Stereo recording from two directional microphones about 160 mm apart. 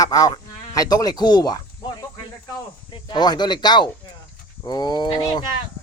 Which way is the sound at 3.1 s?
25° left (ahead or behind).